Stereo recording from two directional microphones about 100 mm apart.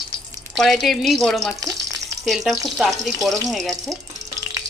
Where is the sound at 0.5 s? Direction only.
5° left (ahead or behind).